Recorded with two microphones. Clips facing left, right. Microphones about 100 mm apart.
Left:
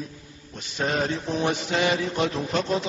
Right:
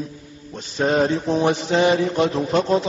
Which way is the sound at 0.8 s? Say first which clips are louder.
Right 7 dB; 30° right (ahead or behind).